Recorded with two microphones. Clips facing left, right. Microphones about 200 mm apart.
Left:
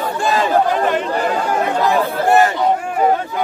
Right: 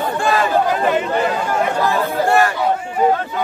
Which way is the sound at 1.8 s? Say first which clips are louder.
Left 2 dB; 20° left (ahead or behind).